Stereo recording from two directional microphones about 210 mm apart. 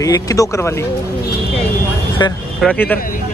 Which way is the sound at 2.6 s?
10° left (ahead or behind).